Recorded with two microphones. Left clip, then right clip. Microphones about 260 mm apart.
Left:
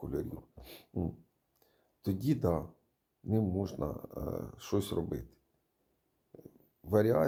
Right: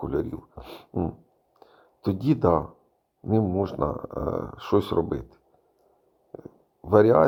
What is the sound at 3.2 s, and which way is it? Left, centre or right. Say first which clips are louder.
Speech: right 10 dB; centre.